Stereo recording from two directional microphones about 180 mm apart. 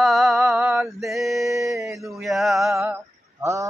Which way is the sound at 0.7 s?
Centre (ahead or behind).